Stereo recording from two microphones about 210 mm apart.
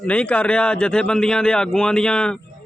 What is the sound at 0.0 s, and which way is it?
A man's voice, 5° left (ahead or behind).